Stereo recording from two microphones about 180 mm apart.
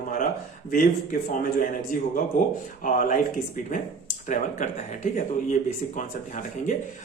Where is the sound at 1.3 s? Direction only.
50° left (ahead or behind).